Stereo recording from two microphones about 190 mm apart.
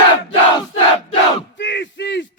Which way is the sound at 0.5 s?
30° left (ahead or behind).